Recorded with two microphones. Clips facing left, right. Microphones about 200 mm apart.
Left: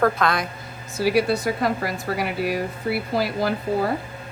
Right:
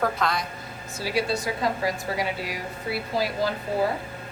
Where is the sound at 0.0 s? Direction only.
55° left (ahead or behind).